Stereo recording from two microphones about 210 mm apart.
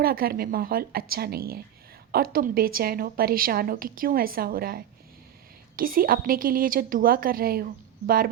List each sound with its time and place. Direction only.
0.0 s a woman's voice: 45° right (ahead or behind)